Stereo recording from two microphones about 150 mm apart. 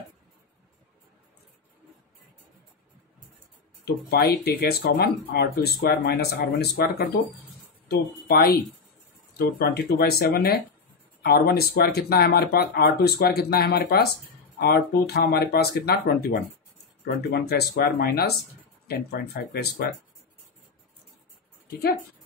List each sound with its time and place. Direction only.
3.8 s speech: 90° left
21.6 s speech: 90° left